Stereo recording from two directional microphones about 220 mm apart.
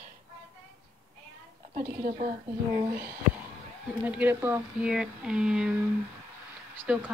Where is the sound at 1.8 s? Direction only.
40° right (ahead or behind).